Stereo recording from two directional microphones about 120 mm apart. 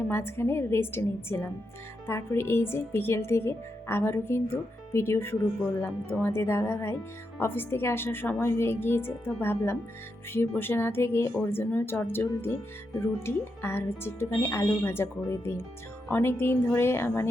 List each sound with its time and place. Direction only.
0.0 s speech: 20° left (ahead or behind)